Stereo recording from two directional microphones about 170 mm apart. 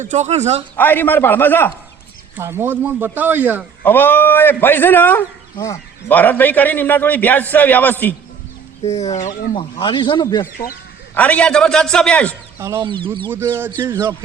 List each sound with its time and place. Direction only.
0.0 s speech: 45° right (ahead or behind)
0.8 s a man's voice: 10° left (ahead or behind)
2.3 s speech: 15° right (ahead or behind)
3.8 s a man's voice: 10° left (ahead or behind)
9.0 s speech: 45° left (ahead or behind)
9.6 s speech: 30° left (ahead or behind)
11.1 s a man's voice: 10° left (ahead or behind)
12.5 s speech: 15° right (ahead or behind)
13.7 s a sound: 20° right (ahead or behind)